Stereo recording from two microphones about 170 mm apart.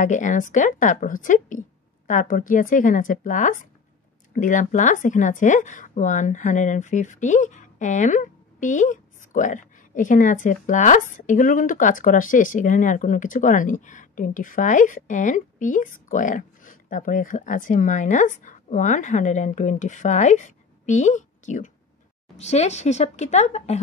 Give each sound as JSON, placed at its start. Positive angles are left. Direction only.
{"t": 0.0, "sound": "a woman's voice", "side_deg": 45}